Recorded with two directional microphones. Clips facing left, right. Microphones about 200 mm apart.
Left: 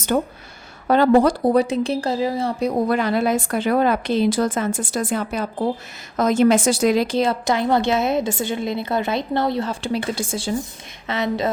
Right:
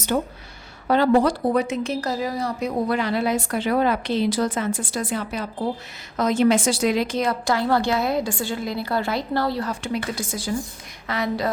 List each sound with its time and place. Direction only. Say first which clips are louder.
0.1 s a woman's voice: left 3 dB; 50° left (ahead or behind); by 2.7 s 30° left (ahead or behind)
2.9 s a woman's voice: left 3 dB; 50° left (ahead or behind); by 11.5 s 25° left (ahead or behind)